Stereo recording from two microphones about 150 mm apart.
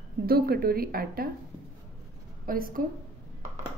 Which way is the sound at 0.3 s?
90° right.